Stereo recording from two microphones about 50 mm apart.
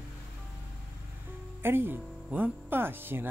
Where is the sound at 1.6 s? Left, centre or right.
Right.